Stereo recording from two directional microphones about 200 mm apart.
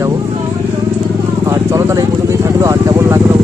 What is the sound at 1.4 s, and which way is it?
Vehicle, 15° right (ahead or behind).